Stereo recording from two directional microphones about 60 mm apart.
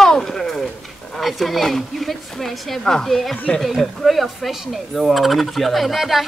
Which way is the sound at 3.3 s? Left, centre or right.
Centre.